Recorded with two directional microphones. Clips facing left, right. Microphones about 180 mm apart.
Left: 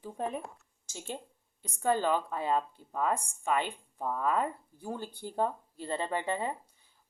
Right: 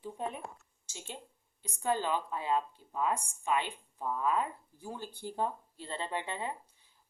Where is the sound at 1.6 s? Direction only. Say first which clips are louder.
Left 4 dB; 50° left (ahead or behind).